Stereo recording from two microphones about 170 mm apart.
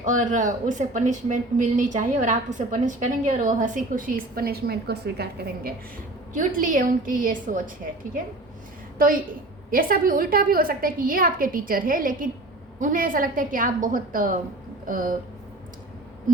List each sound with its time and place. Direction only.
0.0 s speech: 50° right (ahead or behind); by 5.7 s 70° right (ahead or behind)
6.3 s speech: 55° right (ahead or behind)
9.0 s a woman's voice: 55° right (ahead or behind)